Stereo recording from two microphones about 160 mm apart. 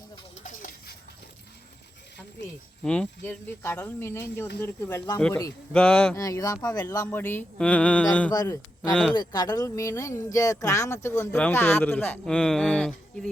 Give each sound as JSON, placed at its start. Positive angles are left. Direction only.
{"t": 0.4, "sound": "a sound", "side_deg": 60}
{"t": 2.8, "sound": "speech", "side_deg": 5}
{"t": 5.7, "sound": "speech", "side_deg": 5}
{"t": 6.1, "sound": "speech", "side_deg": 20}
{"t": 8.3, "sound": "a man's voice", "side_deg": 25}